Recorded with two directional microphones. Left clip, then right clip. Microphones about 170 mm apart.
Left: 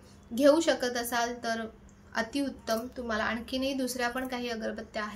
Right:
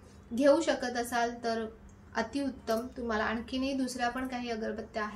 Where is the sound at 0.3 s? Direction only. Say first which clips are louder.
Left 2 dB; 20° left (ahead or behind).